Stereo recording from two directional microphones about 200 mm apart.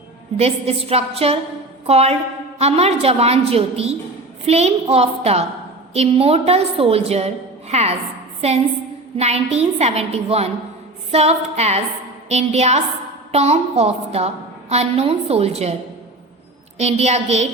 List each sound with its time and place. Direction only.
0.3 s a woman's voice: 30° right (ahead or behind)
16.7 s a woman's voice: 35° right (ahead or behind)